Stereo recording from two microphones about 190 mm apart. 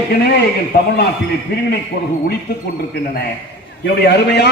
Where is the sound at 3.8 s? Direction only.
60° left (ahead or behind).